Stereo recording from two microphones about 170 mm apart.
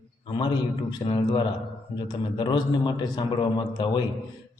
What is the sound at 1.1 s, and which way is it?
A man's voice, 30° left (ahead or behind).